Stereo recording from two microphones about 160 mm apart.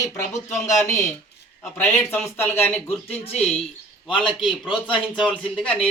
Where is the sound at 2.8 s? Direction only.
40° left (ahead or behind).